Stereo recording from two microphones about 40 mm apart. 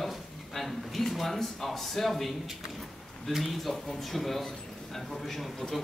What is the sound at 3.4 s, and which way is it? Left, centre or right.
Speech, centre.